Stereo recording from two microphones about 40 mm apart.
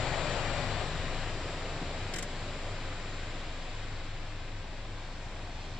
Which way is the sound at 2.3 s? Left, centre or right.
Centre.